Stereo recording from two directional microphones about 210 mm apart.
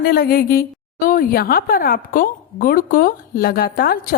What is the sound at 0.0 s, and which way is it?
A woman's voice, 45° left (ahead or behind).